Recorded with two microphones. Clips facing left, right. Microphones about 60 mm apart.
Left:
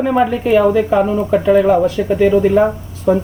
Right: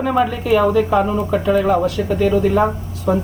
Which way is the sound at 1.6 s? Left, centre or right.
Centre.